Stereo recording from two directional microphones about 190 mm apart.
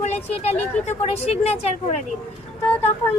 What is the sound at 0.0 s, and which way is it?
Speech, 35° left (ahead or behind).